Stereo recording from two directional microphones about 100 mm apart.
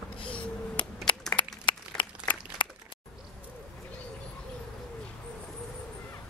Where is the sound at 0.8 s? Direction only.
55° left (ahead or behind).